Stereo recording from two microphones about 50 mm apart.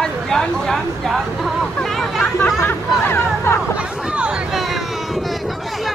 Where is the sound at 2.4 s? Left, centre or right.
Left.